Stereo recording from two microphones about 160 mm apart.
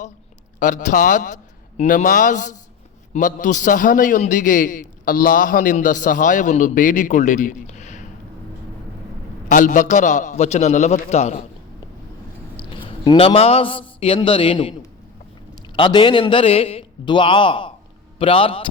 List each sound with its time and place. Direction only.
0.6 s a man's voice: 50° left (ahead or behind)
9.5 s a man's voice: 55° left (ahead or behind)
12.7 s a man's voice: 30° left (ahead or behind)